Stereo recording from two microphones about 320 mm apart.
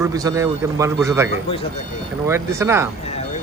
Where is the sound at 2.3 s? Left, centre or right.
Centre.